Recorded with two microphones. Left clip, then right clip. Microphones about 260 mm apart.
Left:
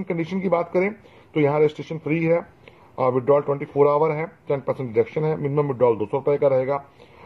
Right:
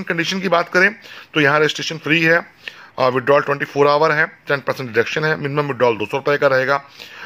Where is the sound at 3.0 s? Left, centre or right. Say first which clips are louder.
Right 4 dB; right.